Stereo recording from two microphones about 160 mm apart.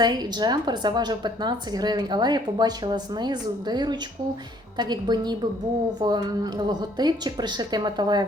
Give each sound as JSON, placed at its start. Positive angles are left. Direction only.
{"t": 0.0, "sound": "a woman's voice", "side_deg": -25}